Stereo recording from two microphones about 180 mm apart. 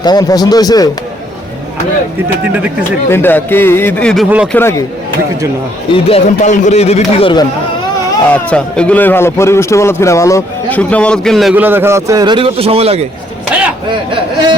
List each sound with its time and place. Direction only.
0.0 s speech: 20° left (ahead or behind)
3.1 s a man's voice: 10° left (ahead or behind)
5.9 s a man's voice: 30° left (ahead or behind)
8.3 s a man's voice: 5° left (ahead or behind); by 13.1 s 35° right (ahead or behind)
13.5 s a sound: 5° right (ahead or behind)